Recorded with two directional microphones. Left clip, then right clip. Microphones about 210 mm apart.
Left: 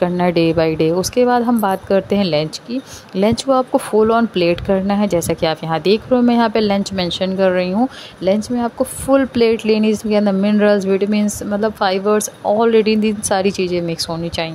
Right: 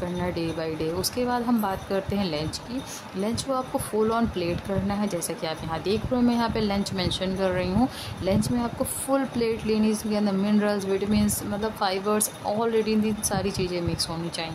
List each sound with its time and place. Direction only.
0.0 s a woman's voice: 35° left (ahead or behind)